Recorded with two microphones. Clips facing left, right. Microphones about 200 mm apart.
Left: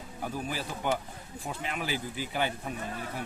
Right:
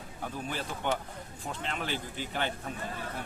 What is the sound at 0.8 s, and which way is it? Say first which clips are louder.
Speech: left 2 dB; 5° left (ahead or behind).